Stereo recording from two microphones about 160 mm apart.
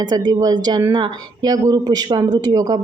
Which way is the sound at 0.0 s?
25° right (ahead or behind).